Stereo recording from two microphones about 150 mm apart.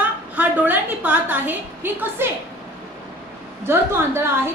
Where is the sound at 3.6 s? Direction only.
15° right (ahead or behind).